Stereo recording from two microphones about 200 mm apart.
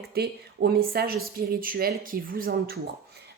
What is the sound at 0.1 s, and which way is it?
Speech, 50° right (ahead or behind).